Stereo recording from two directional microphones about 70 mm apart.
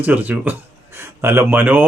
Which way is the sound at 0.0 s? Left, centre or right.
Right.